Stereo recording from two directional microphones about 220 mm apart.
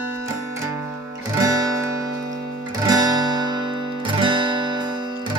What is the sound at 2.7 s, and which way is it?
Music, 15° right (ahead or behind).